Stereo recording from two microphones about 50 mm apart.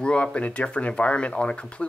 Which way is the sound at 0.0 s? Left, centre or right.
Left.